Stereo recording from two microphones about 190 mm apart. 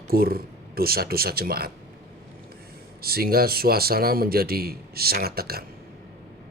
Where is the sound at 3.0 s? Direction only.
55° right (ahead or behind).